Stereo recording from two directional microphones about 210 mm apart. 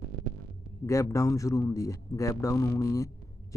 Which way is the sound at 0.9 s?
15° left (ahead or behind).